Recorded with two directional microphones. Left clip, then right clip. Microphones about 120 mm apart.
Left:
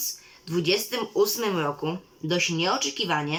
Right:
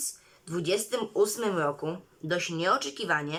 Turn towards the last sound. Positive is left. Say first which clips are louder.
# left 3 dB
turn(degrees=15)  # may be behind; listen again after turning